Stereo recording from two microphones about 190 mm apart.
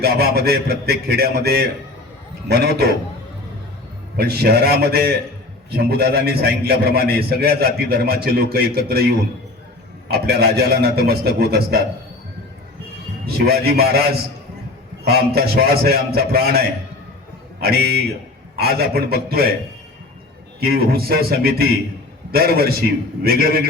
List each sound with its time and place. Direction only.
0.0 s a man's voice: 55° right (ahead or behind)
4.2 s a man's voice: 55° right (ahead or behind)
13.2 s a man's voice: 55° right (ahead or behind)
20.6 s a man's voice: 55° right (ahead or behind)